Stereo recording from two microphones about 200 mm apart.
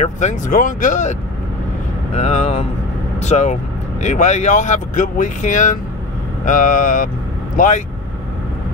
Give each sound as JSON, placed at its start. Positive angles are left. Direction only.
{"t": 0.0, "sound": "speech", "side_deg": 35}
{"t": 2.1, "sound": "speech", "side_deg": 35}